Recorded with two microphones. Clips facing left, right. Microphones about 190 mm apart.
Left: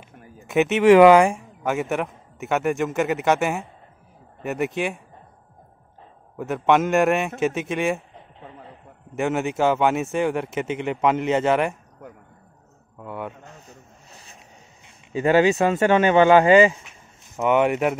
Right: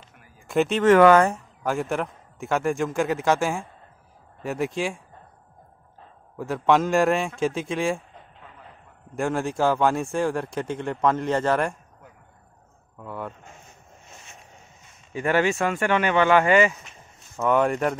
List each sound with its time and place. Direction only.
0.8 s speech: 15° left (ahead or behind)
6.3 s speech: centre (ahead or behind)
8.1 s a sound: 30° left (ahead or behind)
9.1 s a man's voice: 5° left (ahead or behind)
13.0 s speech: centre (ahead or behind)
14.1 s a sound: 35° left (ahead or behind)
15.1 s speech: 20° left (ahead or behind)
17.4 s a man's voice: 10° left (ahead or behind)